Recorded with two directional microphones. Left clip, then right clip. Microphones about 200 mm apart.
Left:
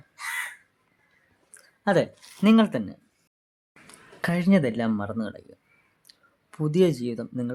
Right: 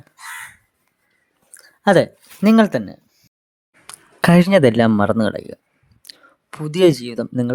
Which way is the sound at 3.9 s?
40° right (ahead or behind).